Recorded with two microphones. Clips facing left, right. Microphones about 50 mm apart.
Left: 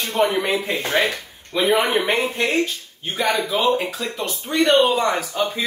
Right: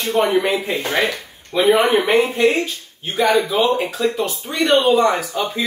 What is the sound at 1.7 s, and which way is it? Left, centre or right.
Speech, centre.